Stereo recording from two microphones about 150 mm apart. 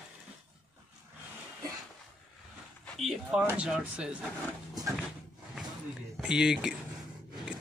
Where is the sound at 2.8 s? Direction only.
Centre (ahead or behind).